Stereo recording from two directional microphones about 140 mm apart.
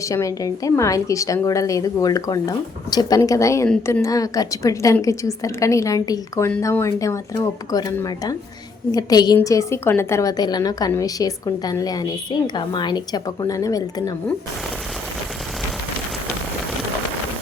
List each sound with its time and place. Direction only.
0.1 s a woman's voice: 25° left (ahead or behind)